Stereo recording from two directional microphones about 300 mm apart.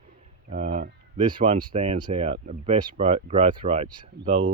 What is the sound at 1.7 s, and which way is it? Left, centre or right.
Speech, right.